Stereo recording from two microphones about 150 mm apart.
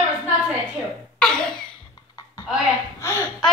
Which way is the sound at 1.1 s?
5° left (ahead or behind).